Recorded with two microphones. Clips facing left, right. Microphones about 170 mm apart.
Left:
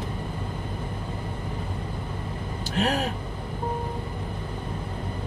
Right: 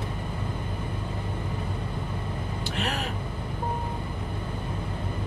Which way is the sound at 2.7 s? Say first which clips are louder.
Left 7 dB; 40° left (ahead or behind).